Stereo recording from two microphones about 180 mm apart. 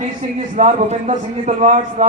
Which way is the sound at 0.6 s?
40° right (ahead or behind).